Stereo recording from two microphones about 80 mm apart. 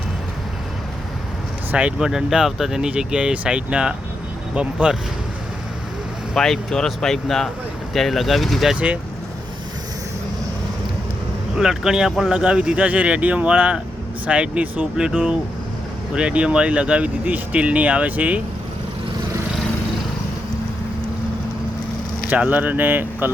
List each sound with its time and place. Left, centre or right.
1.7 s speech: centre
6.3 s speech: centre
8.7 s speech: centre
11.5 s speech: centre
22.4 s speech: right